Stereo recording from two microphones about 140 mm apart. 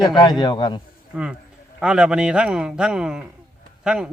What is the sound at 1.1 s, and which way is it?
A man's voice, 10° right (ahead or behind).